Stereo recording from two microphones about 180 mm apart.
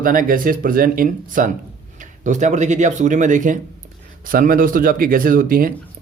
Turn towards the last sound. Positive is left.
turn(degrees=-50)  # may be behind; listen again after turning